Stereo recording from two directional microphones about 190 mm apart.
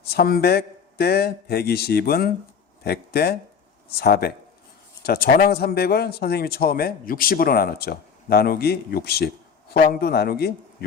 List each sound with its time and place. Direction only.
0.1 s a man's voice: 55° left (ahead or behind)